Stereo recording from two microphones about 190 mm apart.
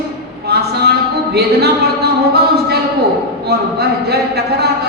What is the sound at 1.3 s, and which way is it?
A capella, 55° right (ahead or behind).